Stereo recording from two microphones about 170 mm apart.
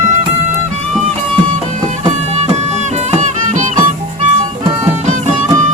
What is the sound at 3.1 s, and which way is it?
Music, 45° right (ahead or behind).